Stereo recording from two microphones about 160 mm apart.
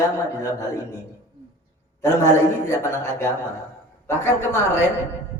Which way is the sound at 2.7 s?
15° left (ahead or behind).